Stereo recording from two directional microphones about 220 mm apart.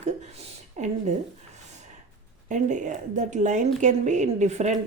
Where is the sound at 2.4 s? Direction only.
35° right (ahead or behind).